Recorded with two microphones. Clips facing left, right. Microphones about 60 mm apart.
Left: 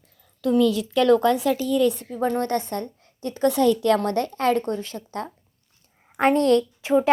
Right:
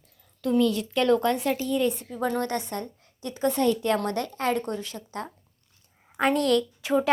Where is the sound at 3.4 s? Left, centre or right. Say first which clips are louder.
Left 5 dB; left.